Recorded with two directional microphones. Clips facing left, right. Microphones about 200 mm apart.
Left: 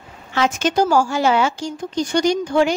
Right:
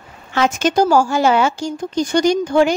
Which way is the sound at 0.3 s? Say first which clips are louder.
Right 2 dB; 45° right (ahead or behind).